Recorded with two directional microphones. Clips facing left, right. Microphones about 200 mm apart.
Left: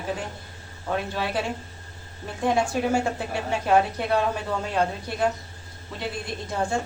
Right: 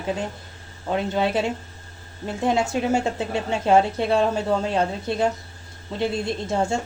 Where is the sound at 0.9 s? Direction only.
25° right (ahead or behind).